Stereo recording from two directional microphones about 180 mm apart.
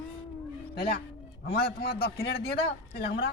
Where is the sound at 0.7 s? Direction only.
60° left (ahead or behind).